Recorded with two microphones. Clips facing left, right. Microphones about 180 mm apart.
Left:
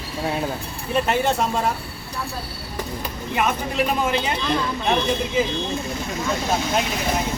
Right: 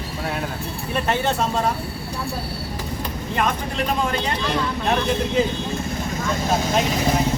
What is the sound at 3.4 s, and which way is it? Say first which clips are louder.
Speech: left 2 dB; 5° left (ahead or behind).